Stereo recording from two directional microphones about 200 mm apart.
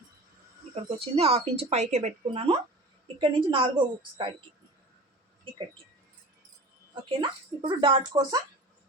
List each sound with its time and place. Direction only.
0.9 s speech: 30° right (ahead or behind)
6.9 s speech: 25° right (ahead or behind)